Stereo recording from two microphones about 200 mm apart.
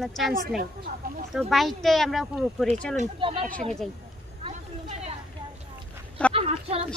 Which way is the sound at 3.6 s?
Centre (ahead or behind).